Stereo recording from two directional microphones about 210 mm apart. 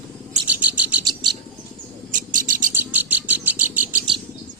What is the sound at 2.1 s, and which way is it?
Owl, 40° right (ahead or behind).